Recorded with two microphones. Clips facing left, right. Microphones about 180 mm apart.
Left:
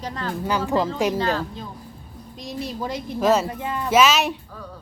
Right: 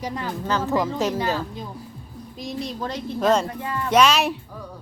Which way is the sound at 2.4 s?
5° left (ahead or behind).